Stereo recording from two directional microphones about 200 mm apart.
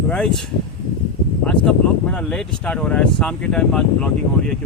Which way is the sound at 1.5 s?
5° left (ahead or behind).